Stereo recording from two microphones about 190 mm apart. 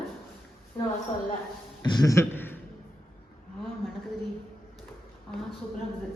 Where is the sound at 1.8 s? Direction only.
20° left (ahead or behind).